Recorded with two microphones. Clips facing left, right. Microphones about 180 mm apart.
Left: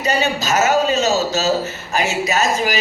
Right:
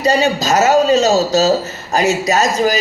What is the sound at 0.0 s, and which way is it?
A man's voice, 35° right (ahead or behind).